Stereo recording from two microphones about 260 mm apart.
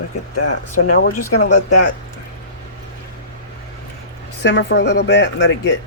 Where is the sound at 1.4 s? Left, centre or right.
Left.